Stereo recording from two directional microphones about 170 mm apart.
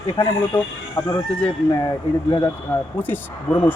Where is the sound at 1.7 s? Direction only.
20° left (ahead or behind).